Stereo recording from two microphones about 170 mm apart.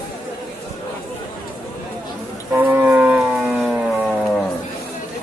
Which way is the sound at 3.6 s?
Centre (ahead or behind).